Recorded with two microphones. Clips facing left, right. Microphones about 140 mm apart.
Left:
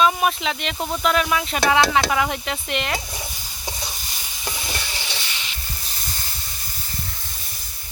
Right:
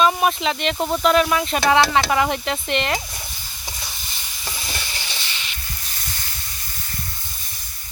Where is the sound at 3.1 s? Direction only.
10° left (ahead or behind).